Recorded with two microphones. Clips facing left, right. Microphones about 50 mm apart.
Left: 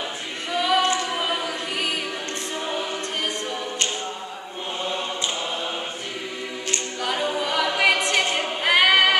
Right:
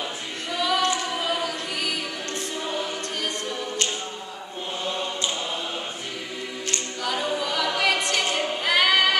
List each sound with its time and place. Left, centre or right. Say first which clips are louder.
0.6 s music: left 3 dB; centre
2.6 s choir: left 2 dB; centre
4.8 s chant: even; centre
7.0 s a capella: left 1 dB; centre